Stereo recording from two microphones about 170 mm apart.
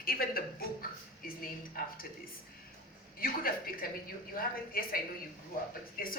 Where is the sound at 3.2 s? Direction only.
60° left (ahead or behind).